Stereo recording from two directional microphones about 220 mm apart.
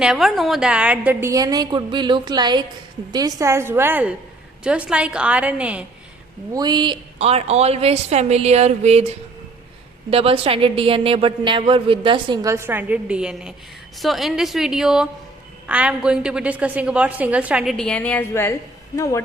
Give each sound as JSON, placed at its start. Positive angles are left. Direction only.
{"t": 0.0, "sound": "a woman's voice", "side_deg": 0}
{"t": 6.5, "sound": "a woman's voice", "side_deg": -20}
{"t": 10.1, "sound": "a woman's voice", "side_deg": -25}